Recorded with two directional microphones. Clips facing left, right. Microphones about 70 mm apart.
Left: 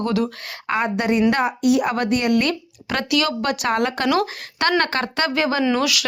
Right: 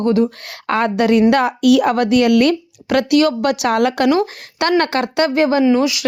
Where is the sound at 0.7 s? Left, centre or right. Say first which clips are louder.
Right 6 dB; right.